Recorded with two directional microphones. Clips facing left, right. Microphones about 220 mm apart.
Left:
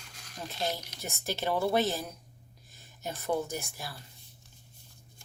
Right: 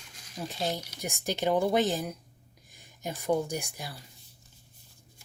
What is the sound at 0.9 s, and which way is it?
A woman's voice, 15° right (ahead or behind).